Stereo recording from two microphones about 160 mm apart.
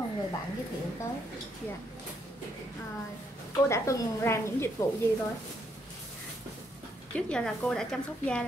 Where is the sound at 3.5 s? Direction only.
20° left (ahead or behind).